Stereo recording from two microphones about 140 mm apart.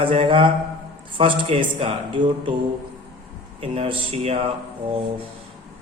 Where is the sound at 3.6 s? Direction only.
45° right (ahead or behind).